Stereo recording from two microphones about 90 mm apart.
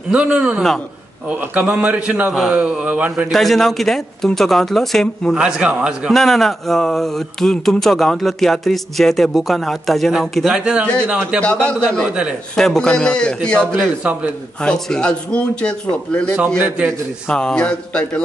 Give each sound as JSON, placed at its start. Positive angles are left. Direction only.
{"t": 0.1, "sound": "speech", "side_deg": -10}
{"t": 3.3, "sound": "a sound", "side_deg": 0}
{"t": 5.3, "sound": "speech", "side_deg": -10}
{"t": 6.1, "sound": "a sound", "side_deg": 5}
{"t": 10.5, "sound": "speech", "side_deg": -10}
{"t": 11.5, "sound": "a man's voice", "side_deg": 10}
{"t": 12.1, "sound": "speech", "side_deg": -10}
{"t": 12.5, "sound": "a man's voice", "side_deg": 5}
{"t": 14.0, "sound": "speech", "side_deg": -15}
{"t": 14.6, "sound": "a man's voice", "side_deg": 10}
{"t": 16.4, "sound": "a man's voice", "side_deg": -25}
{"t": 17.3, "sound": "a man's voice", "side_deg": 10}